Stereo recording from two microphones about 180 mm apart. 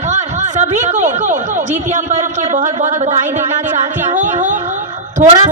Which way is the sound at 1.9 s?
45° right (ahead or behind).